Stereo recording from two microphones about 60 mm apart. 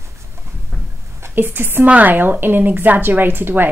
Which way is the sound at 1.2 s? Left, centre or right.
Right.